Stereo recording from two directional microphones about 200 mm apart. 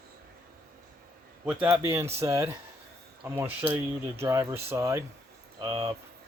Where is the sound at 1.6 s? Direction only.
10° right (ahead or behind).